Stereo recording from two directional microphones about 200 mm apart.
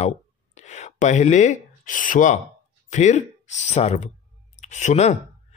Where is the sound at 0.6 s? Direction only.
35° left (ahead or behind).